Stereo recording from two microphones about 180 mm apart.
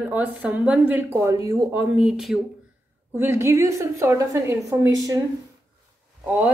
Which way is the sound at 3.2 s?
15° right (ahead or behind).